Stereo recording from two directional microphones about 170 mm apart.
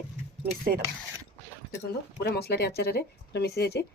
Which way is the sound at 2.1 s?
75° left (ahead or behind).